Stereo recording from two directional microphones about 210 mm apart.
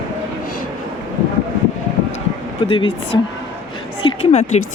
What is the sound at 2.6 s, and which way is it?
Speech, 25° left (ahead or behind).